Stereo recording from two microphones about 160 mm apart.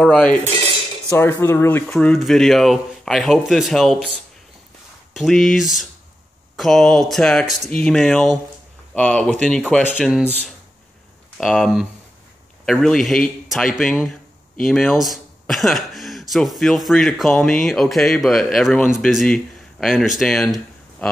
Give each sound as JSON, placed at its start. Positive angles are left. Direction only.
{"t": 0.0, "sound": "speech", "side_deg": 5}
{"t": 5.1, "sound": "speech", "side_deg": 0}
{"t": 11.3, "sound": "speech", "side_deg": 0}